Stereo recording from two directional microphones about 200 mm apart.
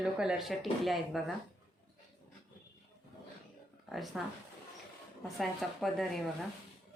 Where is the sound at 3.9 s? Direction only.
Centre (ahead or behind).